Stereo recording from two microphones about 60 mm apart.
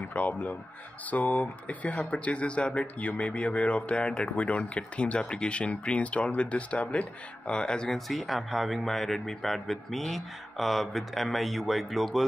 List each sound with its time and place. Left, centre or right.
0.1 s speech: left; by 12.3 s centre